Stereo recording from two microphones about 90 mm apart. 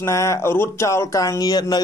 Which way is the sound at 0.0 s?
35° left (ahead or behind).